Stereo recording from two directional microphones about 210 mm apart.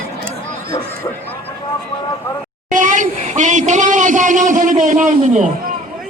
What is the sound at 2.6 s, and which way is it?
Speech, 40° right (ahead or behind).